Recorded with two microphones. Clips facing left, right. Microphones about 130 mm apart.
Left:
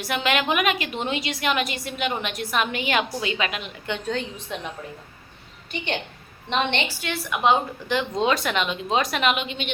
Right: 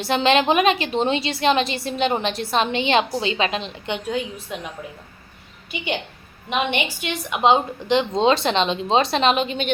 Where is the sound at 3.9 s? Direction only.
10° right (ahead or behind).